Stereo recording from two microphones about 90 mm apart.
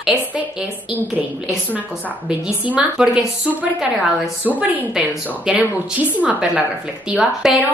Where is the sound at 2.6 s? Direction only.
15° right (ahead or behind).